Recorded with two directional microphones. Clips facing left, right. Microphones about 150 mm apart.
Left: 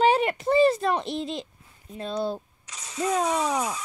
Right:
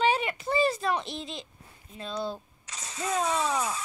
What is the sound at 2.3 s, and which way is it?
Speech, 10° left (ahead or behind).